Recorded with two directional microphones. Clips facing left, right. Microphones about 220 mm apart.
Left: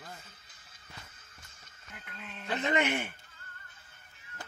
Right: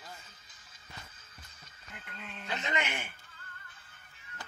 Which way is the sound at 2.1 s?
Centre (ahead or behind).